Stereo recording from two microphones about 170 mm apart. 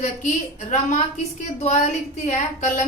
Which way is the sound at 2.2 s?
45° left (ahead or behind).